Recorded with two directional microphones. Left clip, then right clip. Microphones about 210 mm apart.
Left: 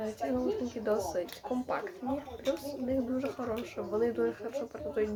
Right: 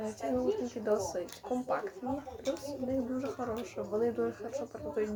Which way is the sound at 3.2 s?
5° left (ahead or behind).